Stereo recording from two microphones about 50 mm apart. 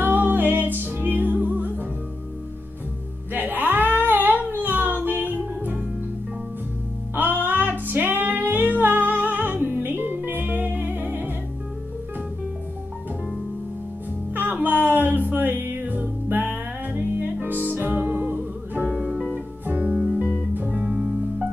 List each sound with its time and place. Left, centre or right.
0.0 s music: right
3.3 s music: right
4.1 s a sound: right
4.6 s music: right
7.2 s music: right
14.3 s music: right
18.9 s music: centre
19.6 s music: right
20.0 s music: centre